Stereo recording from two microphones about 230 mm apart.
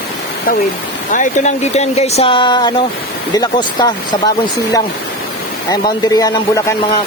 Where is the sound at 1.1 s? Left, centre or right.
Left; by 3.9 s centre.